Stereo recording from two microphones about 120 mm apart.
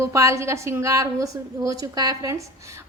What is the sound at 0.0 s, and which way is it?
A woman's voice, 25° right (ahead or behind).